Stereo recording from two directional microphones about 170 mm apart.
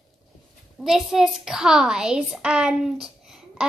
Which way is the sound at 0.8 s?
5° right (ahead or behind).